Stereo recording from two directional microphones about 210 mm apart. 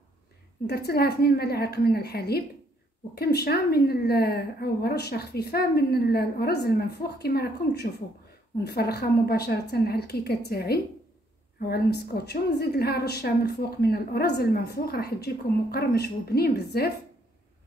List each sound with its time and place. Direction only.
0.7 s a woman's voice: 50° left (ahead or behind)